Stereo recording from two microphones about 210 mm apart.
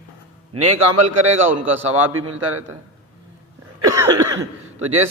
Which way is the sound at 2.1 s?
90° right.